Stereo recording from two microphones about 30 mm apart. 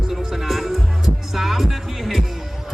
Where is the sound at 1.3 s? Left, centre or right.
Centre.